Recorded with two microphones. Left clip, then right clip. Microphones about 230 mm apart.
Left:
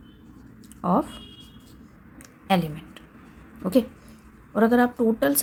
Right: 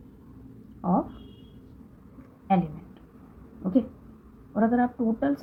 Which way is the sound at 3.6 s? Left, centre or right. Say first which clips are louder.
Left 4 dB; left.